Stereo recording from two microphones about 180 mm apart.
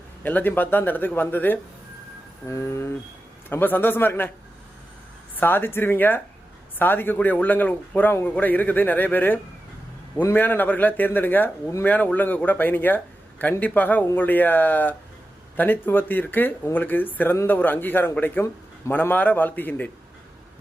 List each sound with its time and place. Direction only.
0.2 s speech: 10° left (ahead or behind)
5.4 s speech: 10° left (ahead or behind)